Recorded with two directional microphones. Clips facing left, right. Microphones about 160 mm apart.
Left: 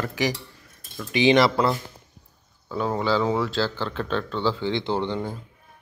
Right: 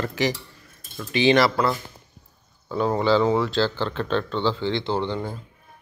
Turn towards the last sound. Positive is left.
turn(degrees=15)  # may be behind; listen again after turning